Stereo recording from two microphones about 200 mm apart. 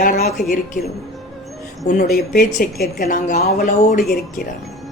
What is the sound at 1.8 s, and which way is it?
Speech, 45° left (ahead or behind).